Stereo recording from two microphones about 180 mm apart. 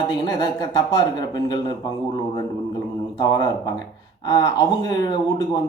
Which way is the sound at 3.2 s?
20° left (ahead or behind).